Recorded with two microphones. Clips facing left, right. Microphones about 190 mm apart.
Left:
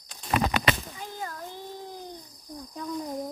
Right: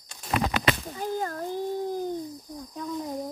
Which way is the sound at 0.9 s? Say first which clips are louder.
Right 8 dB; 45° right (ahead or behind).